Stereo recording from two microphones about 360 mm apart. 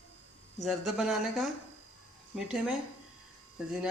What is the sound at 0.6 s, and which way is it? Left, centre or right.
Speech, centre.